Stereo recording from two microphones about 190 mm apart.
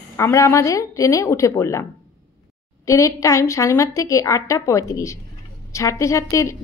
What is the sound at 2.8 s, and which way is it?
A woman's voice, 15° left (ahead or behind).